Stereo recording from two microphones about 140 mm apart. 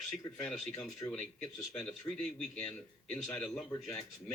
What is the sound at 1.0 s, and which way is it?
Speech, 25° left (ahead or behind).